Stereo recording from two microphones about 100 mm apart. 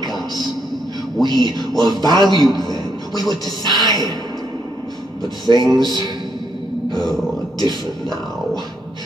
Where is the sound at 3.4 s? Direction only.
45° right (ahead or behind).